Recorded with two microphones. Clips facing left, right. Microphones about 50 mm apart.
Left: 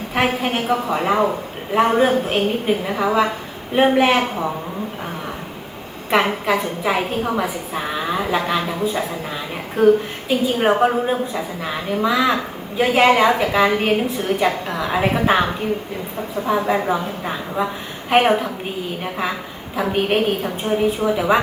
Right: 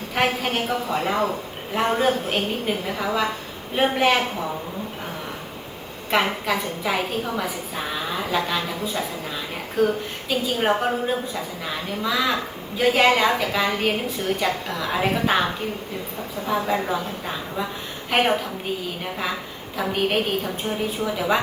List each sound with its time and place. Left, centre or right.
0.1 s a woman's voice: left
6.4 s a woman's voice: left
16.5 s a woman's voice: centre
19.8 s a woman's voice: left